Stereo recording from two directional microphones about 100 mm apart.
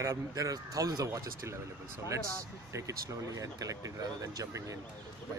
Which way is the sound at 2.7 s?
35° right (ahead or behind).